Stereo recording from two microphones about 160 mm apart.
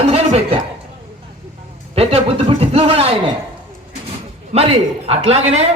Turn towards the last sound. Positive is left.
turn(degrees=-40)  # may be behind; listen again after turning